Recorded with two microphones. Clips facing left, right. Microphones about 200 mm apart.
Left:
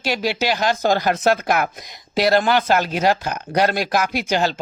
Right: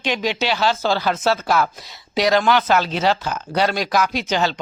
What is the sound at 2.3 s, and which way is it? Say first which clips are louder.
Speech: even; 45° left (ahead or behind).